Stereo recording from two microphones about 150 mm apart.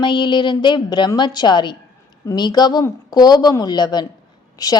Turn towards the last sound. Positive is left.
turn(degrees=25)  # may be behind; listen again after turning